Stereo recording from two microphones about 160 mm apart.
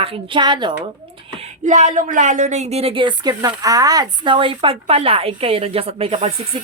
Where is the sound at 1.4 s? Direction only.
45° right (ahead or behind).